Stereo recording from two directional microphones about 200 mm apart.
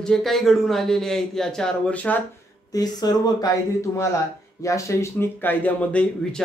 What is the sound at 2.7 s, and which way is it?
Speech, 20° left (ahead or behind).